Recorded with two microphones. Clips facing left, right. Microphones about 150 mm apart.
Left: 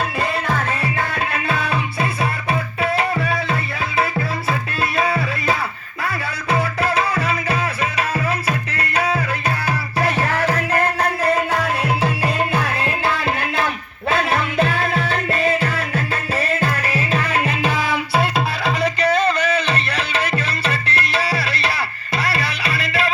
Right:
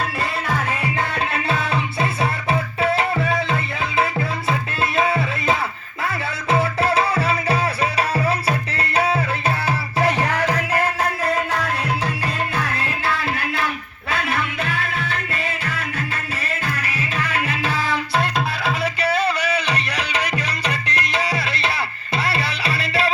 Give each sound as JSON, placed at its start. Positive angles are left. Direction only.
{"t": 0.9, "sound": "music", "side_deg": -25}
{"t": 11.2, "sound": "music", "side_deg": 0}
{"t": 12.5, "sound": "music", "side_deg": 25}
{"t": 17.1, "sound": "music", "side_deg": 30}